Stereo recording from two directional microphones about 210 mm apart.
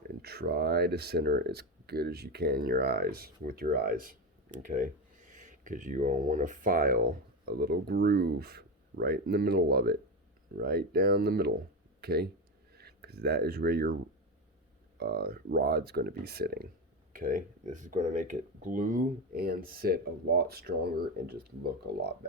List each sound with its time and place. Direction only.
0.1 s speech: 50° right (ahead or behind)
14.9 s speech: 45° right (ahead or behind)